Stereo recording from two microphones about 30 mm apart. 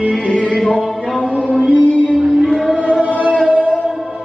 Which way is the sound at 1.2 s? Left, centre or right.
Left.